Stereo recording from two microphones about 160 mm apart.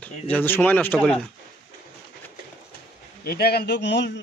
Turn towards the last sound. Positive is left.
turn(degrees=90)